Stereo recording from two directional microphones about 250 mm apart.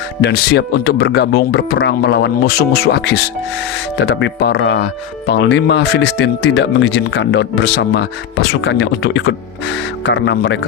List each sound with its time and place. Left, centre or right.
0.2 s speech: left